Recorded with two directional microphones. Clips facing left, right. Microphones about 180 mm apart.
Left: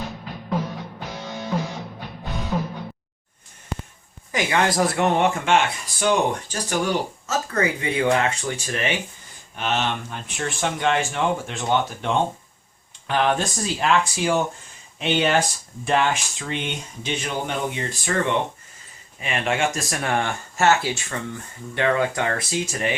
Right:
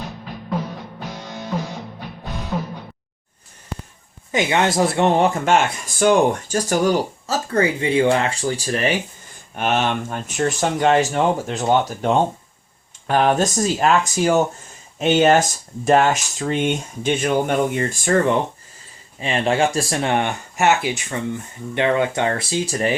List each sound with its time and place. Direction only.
1.5 s music: 5° right (ahead or behind)
4.3 s speech: 25° right (ahead or behind)
9.6 s speech: 50° right (ahead or behind)
19.2 s speech: 30° right (ahead or behind)